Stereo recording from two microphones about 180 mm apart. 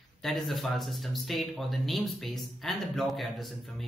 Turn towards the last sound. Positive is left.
turn(degrees=0)  # may be behind; listen again after turning